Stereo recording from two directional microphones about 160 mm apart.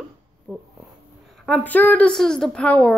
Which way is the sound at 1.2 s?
Centre (ahead or behind).